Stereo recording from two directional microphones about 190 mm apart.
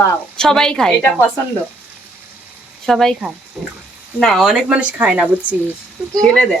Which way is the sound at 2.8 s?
Centre (ahead or behind).